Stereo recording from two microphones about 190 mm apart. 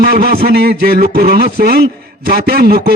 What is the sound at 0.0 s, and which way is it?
A man's voice, 55° right (ahead or behind).